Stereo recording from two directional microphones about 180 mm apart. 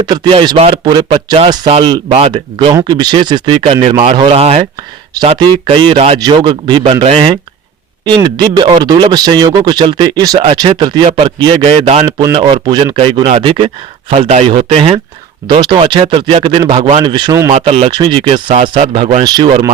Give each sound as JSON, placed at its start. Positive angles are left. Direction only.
{"t": 0.0, "sound": "speech", "side_deg": -25}
{"t": 2.0, "sound": "speech", "side_deg": -35}
{"t": 2.7, "sound": "speech", "side_deg": -25}
{"t": 12.0, "sound": "speech", "side_deg": -20}
{"t": 12.4, "sound": "speech", "side_deg": -30}
{"t": 17.5, "sound": "speech", "side_deg": -35}
{"t": 19.2, "sound": "speech", "side_deg": -25}